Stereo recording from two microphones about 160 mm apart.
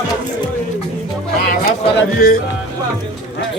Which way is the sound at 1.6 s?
65° left (ahead or behind).